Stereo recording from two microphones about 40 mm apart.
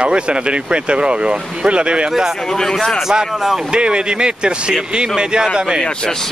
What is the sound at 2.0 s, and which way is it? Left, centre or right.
Speech, centre.